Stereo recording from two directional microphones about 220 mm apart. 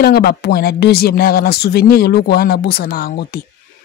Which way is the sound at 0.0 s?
45° left (ahead or behind).